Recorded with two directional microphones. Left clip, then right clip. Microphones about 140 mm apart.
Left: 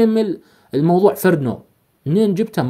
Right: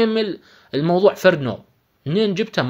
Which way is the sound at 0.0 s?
45° left (ahead or behind).